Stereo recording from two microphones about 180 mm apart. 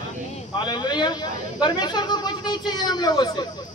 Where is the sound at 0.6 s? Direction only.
25° left (ahead or behind).